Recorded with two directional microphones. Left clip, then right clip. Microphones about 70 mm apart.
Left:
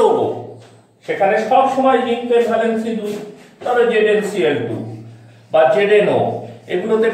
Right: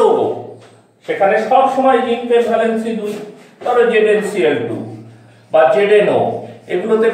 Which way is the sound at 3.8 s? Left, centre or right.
Centre.